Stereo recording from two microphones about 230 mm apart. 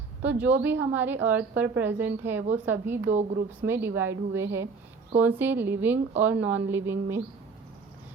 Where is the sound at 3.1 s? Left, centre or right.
Right.